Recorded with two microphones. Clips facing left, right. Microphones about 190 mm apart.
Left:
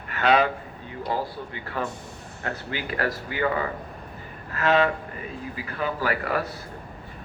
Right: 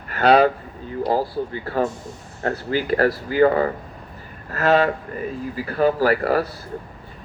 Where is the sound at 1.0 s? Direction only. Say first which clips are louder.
Right 7 dB; 35° right (ahead or behind).